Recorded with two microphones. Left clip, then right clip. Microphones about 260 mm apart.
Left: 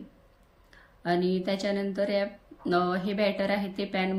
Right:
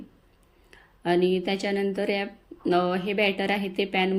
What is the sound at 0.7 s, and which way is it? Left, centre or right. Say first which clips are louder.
A woman's voice: right 4 dB; centre.